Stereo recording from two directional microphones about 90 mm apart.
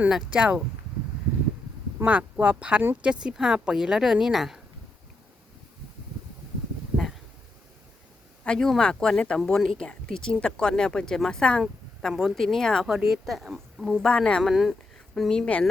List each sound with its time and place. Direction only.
0.1 s speech: 10° right (ahead or behind)
2.0 s speech: 15° right (ahead or behind)
6.9 s a sound: centre (ahead or behind)
8.4 s speech: 5° left (ahead or behind)
11.6 s speech: 5° right (ahead or behind)
14.4 s speech: 5° right (ahead or behind)
15.1 s speech: 5° left (ahead or behind)